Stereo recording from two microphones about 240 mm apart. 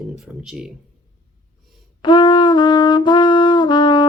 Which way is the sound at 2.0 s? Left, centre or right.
Centre.